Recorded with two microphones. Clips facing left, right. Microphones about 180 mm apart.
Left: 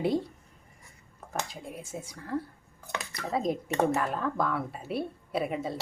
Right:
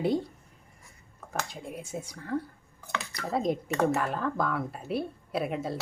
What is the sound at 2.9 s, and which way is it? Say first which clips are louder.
Speech: right 1 dB; 20° left (ahead or behind).